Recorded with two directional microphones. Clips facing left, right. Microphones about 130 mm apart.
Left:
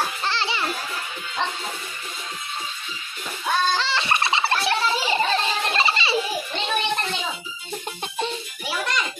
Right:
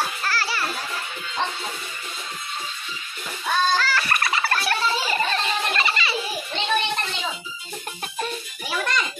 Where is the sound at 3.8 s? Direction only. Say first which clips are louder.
Even; 25° left (ahead or behind).